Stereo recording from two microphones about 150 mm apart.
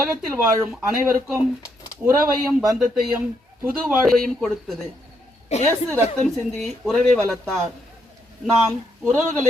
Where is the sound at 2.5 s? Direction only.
Centre (ahead or behind).